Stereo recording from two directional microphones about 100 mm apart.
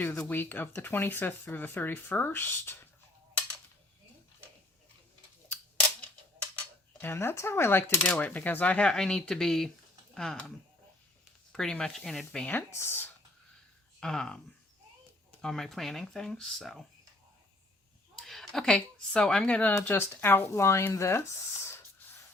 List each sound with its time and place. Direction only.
0.0 s speech: 25° left (ahead or behind)
7.0 s speech: 25° left (ahead or behind)
8.0 s speech: 15° left (ahead or behind)
11.5 s speech: 5° left (ahead or behind)
12.7 s speech: 25° left (ahead or behind)
14.0 s speech: 5° left (ahead or behind)
15.4 s speech: 5° left (ahead or behind)
18.2 s speech: 5° left (ahead or behind); by 21.8 s 25° left (ahead or behind)